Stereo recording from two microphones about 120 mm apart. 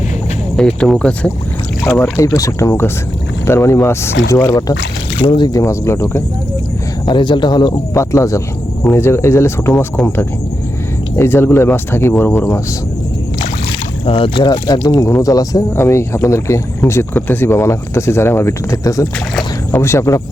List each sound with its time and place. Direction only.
0.5 s speech: 5° left (ahead or behind)
1.9 s speech: 20° left (ahead or behind)
5.2 s speech: 45° left (ahead or behind)
5.5 s speech: 25° left (ahead or behind)
7.0 s speech: 40° left (ahead or behind)
8.1 s speech: 25° left (ahead or behind)
14.0 s speech: 50° left (ahead or behind); by 20.2 s 25° left (ahead or behind)